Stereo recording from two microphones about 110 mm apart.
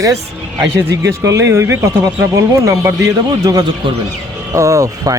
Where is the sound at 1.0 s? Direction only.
30° right (ahead or behind).